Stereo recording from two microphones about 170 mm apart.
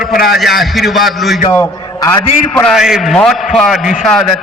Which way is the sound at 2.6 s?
Centre (ahead or behind).